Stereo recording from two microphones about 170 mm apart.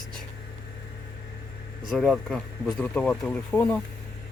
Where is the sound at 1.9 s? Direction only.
Centre (ahead or behind).